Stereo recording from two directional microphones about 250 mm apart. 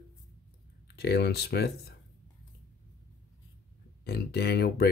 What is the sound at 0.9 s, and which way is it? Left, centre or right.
Speech, left.